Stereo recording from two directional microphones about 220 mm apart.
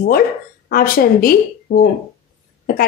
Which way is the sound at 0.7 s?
40° left (ahead or behind).